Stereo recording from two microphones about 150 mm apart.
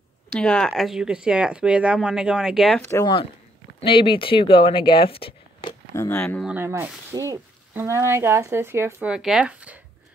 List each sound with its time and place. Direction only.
0.4 s speech: 5° left (ahead or behind)
3.8 s speech: 35° left (ahead or behind)
5.9 s speech: 10° left (ahead or behind)
6.4 s speech: 15° right (ahead or behind)
9.1 s speech: 5° right (ahead or behind)